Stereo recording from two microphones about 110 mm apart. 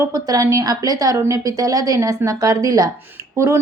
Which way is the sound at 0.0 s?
30° right (ahead or behind).